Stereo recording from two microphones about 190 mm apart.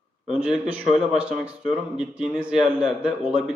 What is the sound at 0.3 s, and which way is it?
A man's voice, 5° right (ahead or behind).